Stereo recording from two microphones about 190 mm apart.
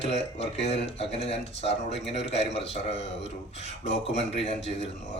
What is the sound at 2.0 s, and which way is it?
Speech, 65° left (ahead or behind).